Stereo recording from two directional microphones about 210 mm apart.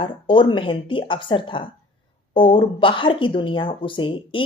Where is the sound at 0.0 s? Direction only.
25° left (ahead or behind).